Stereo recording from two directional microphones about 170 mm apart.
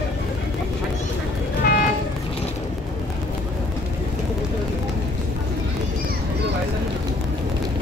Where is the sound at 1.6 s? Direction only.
60° left (ahead or behind).